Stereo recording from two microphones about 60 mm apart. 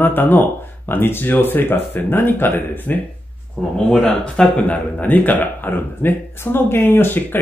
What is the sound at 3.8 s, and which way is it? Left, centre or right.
A man's voice, centre.